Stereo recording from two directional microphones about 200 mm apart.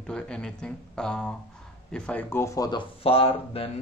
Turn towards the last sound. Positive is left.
turn(degrees=30)  # may be behind; listen again after turning